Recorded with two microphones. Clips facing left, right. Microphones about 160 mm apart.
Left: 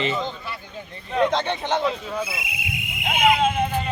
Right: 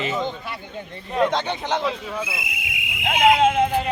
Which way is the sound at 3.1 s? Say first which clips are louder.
Right 3 dB; 80° right.